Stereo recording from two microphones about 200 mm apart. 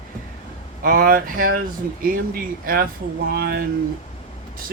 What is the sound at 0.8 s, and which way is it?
Speech, 45° right (ahead or behind).